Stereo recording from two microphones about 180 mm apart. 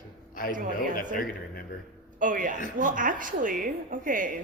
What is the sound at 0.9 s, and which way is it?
Speech, 50° left (ahead or behind).